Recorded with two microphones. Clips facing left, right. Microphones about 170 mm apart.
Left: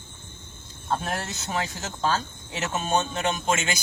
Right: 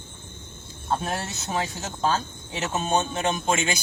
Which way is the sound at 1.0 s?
25° right (ahead or behind).